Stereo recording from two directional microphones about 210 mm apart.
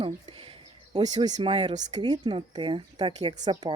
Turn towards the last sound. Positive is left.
turn(degrees=-20)  # may be behind; listen again after turning